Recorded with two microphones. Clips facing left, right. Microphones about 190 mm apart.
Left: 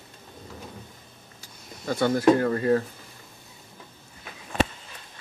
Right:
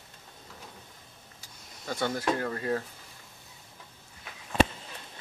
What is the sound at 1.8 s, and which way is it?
Speech, 65° left (ahead or behind).